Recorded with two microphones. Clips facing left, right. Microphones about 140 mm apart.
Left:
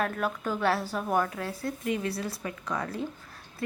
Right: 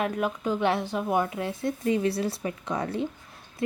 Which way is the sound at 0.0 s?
15° right (ahead or behind).